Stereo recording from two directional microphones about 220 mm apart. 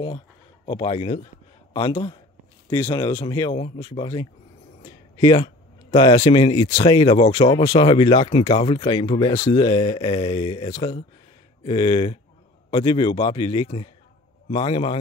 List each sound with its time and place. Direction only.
0.7 s speech: 25° left (ahead or behind)